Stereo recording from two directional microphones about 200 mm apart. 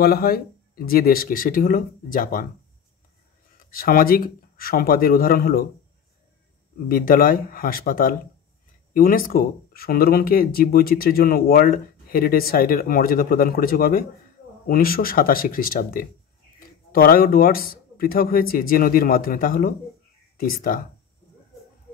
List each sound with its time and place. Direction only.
0.0 s speech: 50° left (ahead or behind)
3.5 s speech: 45° left (ahead or behind)
6.9 s speech: 45° left (ahead or behind)